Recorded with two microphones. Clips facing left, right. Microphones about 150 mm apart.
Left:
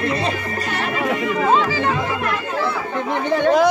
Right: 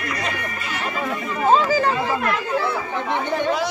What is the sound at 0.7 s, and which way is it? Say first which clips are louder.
Music: left 4 dB; 70° left (ahead or behind).